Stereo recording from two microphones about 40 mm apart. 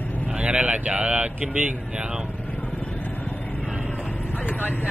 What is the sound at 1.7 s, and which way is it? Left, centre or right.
Speech, right.